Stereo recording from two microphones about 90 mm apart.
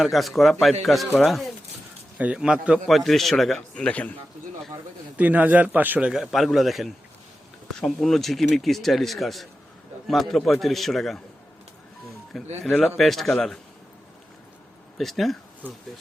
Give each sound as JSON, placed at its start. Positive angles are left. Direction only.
{"t": 0.0, "sound": "speech", "side_deg": 0}
{"t": 2.1, "sound": "a man's voice", "side_deg": -15}
{"t": 2.8, "sound": "speech", "side_deg": 0}
{"t": 3.8, "sound": "a man's voice", "side_deg": 15}
{"t": 5.1, "sound": "a man's voice", "side_deg": -15}
{"t": 6.1, "sound": "speech", "side_deg": 0}
{"t": 12.3, "sound": "speech", "side_deg": 0}
{"t": 14.9, "sound": "speech", "side_deg": 0}